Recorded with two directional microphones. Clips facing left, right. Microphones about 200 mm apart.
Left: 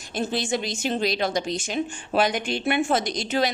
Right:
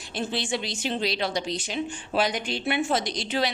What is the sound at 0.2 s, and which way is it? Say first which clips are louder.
A woman's voice: left 3 dB; 45° left (ahead or behind).